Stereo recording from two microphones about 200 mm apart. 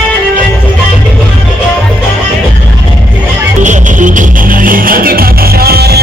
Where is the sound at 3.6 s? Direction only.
40° right (ahead or behind).